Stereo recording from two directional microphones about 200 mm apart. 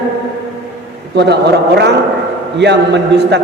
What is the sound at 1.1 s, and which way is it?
A man's voice, 55° right (ahead or behind).